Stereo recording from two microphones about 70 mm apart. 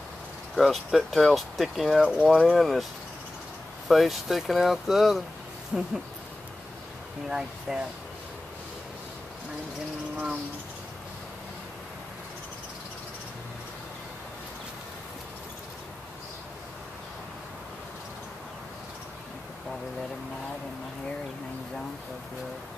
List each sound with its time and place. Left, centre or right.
0.6 s speech: centre
2.0 s speech: centre
2.5 s speech: centre
3.9 s speech: centre
7.2 s speech: centre